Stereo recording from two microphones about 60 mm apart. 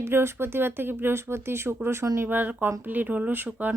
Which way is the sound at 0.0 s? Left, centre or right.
Right.